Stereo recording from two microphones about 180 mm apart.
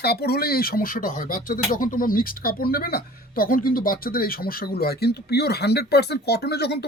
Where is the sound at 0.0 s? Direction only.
60° left (ahead or behind).